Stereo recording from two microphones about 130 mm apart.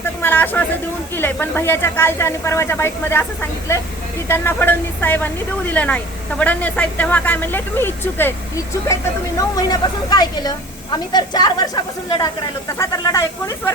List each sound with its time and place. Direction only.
0.0 s a sound: 15° left (ahead or behind)
1.1 s speech: 15° left (ahead or behind)
9.6 s a woman's voice: 30° left (ahead or behind)